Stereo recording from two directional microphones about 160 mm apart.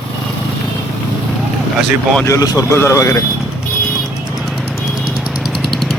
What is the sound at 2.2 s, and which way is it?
Speech, 20° left (ahead or behind).